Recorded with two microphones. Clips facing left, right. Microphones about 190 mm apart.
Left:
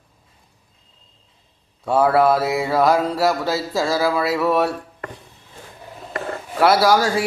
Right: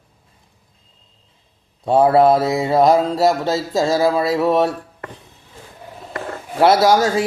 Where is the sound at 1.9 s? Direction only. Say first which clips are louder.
Right 3 dB; 25° right (ahead or behind).